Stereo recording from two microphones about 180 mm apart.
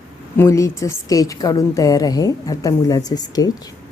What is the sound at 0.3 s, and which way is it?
A woman's voice, 15° left (ahead or behind).